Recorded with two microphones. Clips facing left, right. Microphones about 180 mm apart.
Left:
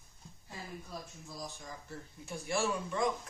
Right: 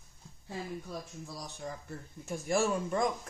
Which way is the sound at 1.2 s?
70° right (ahead or behind).